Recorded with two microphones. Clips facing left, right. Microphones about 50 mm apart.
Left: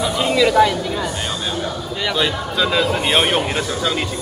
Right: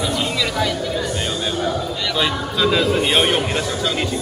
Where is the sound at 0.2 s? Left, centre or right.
Centre.